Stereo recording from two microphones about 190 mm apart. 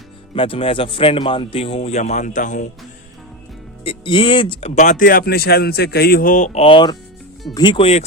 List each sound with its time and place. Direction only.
0.3 s a man's voice: 30° left (ahead or behind)
3.8 s a man's voice: 25° left (ahead or behind)